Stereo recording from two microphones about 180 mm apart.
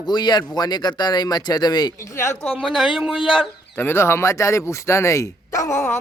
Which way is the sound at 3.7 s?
15° left (ahead or behind).